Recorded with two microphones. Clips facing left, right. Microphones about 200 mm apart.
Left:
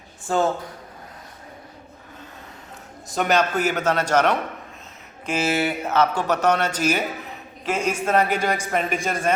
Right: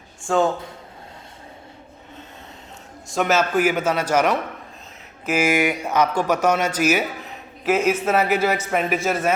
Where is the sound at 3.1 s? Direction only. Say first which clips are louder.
Right 1 dB; centre (ahead or behind).